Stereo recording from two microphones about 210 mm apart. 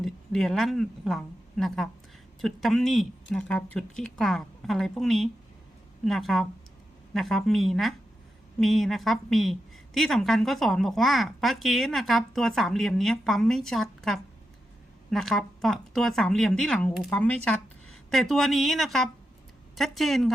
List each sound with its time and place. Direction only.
0.0 s a woman's voice: centre (ahead or behind)